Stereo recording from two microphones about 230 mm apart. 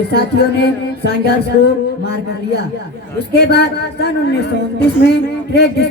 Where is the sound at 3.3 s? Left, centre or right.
Left.